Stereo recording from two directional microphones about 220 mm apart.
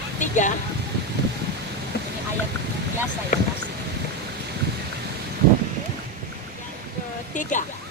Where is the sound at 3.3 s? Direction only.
35° left (ahead or behind).